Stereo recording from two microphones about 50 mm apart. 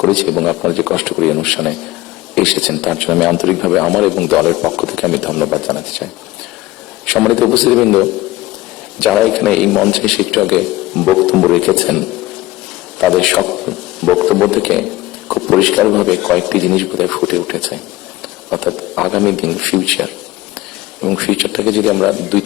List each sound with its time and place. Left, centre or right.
0.1 s speech: centre
13.1 s a man's voice: centre